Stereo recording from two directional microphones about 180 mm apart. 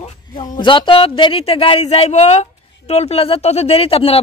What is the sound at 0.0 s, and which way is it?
Speech, 25° left (ahead or behind).